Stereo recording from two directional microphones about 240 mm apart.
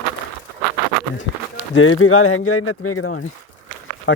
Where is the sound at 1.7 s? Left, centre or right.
Left.